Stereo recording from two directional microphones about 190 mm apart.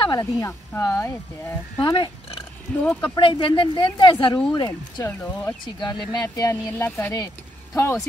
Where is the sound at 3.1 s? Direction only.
25° left (ahead or behind).